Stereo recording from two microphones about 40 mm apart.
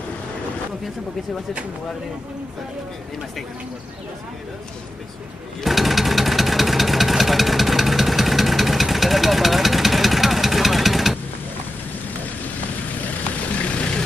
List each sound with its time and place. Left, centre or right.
5.6 s vehicle: centre
13.7 s vehicle: left